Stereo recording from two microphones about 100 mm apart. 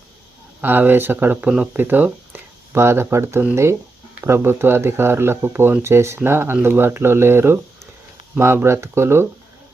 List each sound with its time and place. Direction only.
0.6 s speech: 20° right (ahead or behind)
1.5 s speech: 10° right (ahead or behind)
1.7 s speech: 20° right (ahead or behind)